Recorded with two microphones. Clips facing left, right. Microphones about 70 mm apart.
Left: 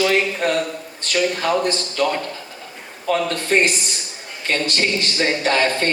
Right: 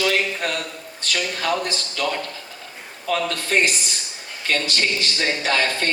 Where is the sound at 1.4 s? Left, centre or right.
Left.